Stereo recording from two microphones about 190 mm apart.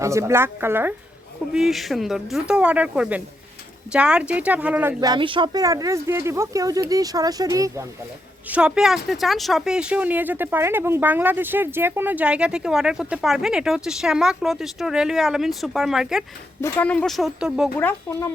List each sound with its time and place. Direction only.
0.0 s speech: 15° right (ahead or behind)
1.5 s speech: centre (ahead or behind); by 7.9 s 20° right (ahead or behind)
8.4 s speech: 5° right (ahead or behind)
16.6 s speech: 10° left (ahead or behind)